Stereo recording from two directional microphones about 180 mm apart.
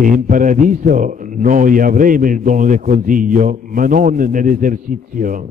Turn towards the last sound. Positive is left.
turn(degrees=-50)  # may be behind; listen again after turning